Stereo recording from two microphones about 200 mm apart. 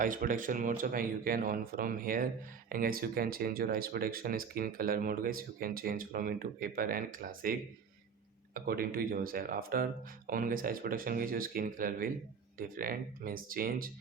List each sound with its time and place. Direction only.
0.0 s speech: 40° right (ahead or behind)
8.5 s speech: 50° right (ahead or behind)